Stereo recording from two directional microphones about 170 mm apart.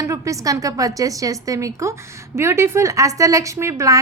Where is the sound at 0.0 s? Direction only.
20° right (ahead or behind).